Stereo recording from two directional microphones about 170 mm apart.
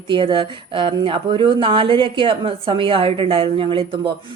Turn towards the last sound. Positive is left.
turn(degrees=-30)  # may be behind; listen again after turning